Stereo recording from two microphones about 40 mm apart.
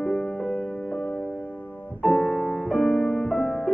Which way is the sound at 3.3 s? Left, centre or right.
Centre.